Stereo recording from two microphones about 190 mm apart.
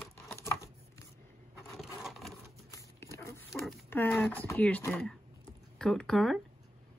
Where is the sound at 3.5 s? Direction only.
5° left (ahead or behind).